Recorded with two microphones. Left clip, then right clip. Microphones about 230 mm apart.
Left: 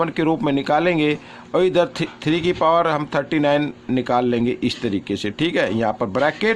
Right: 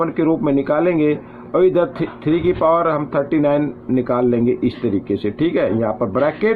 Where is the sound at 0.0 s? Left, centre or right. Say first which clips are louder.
Right 2 dB; left.